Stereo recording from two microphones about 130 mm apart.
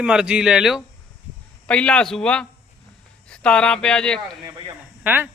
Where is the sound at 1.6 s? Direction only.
10° left (ahead or behind).